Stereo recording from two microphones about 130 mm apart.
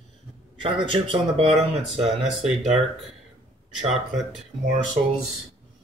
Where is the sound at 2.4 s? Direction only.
60° right (ahead or behind).